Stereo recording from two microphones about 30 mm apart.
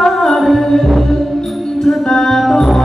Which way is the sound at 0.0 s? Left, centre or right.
Centre.